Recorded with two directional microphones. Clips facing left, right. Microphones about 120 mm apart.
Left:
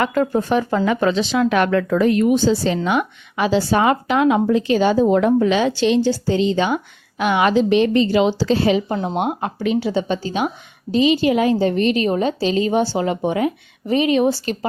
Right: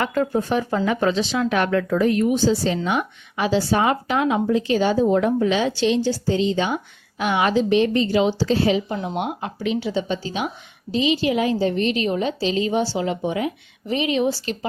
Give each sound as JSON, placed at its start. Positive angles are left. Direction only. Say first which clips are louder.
{"t": 0.0, "sound": "speech", "louder": "left 3 dB", "side_deg": 85}
{"t": 9.0, "sound": "a woman's voice", "louder": "left 5 dB", "side_deg": 40}